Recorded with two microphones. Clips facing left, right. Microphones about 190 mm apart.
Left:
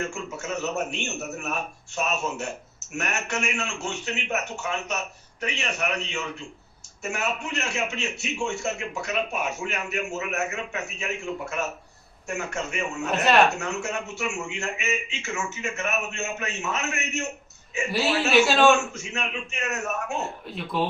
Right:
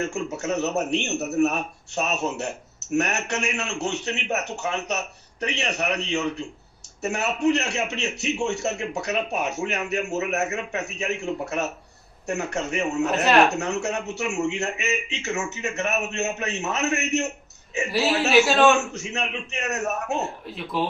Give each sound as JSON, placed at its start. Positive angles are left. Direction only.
{"t": 0.0, "sound": "a man's voice", "side_deg": -40}
{"t": 18.2, "sound": "a man's voice", "side_deg": 0}
{"t": 18.9, "sound": "a man's voice", "side_deg": -40}
{"t": 20.7, "sound": "a man's voice", "side_deg": 0}